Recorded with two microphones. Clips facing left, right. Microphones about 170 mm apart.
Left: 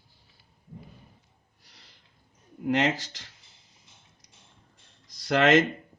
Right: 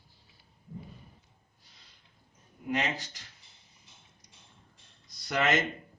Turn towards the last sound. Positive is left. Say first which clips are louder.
# left 8 dB
turn(degrees=90)